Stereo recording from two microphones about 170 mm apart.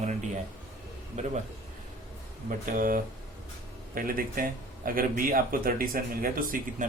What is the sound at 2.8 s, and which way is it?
Speech, 55° right (ahead or behind).